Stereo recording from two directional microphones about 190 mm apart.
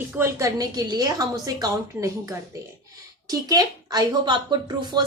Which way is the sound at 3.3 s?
20° right (ahead or behind).